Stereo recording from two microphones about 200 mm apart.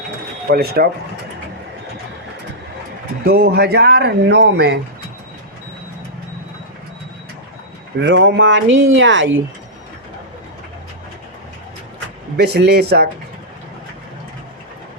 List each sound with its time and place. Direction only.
0.5 s speech: 50° right (ahead or behind)
3.2 s speech: 50° right (ahead or behind)
7.9 s speech: 65° right (ahead or behind)
12.4 s speech: 55° right (ahead or behind)